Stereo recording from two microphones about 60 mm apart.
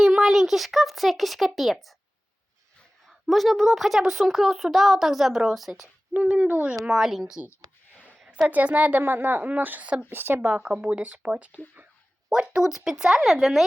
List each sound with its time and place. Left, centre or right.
0.0 s speech: centre
3.1 s a woman's voice: centre
6.1 s a woman's voice: right
6.8 s speech: centre
8.3 s a woman's voice: right
10.5 s a woman's voice: centre